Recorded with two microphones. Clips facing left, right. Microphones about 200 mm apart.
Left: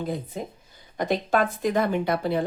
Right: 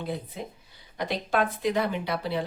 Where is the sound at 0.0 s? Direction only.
45° left (ahead or behind).